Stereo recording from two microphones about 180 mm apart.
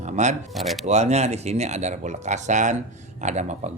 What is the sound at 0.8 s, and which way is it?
Speech, 40° right (ahead or behind).